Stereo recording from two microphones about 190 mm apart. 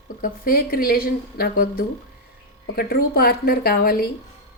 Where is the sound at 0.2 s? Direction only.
50° left (ahead or behind).